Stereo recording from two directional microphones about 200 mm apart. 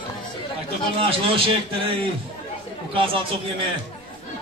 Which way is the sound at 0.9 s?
25° right (ahead or behind).